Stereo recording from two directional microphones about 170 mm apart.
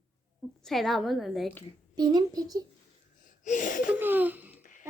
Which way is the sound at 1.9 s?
25° right (ahead or behind).